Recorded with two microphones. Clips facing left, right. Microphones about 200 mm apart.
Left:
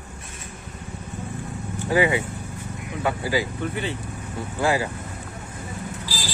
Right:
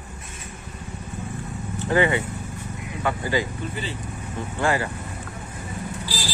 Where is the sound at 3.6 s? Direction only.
60° left (ahead or behind).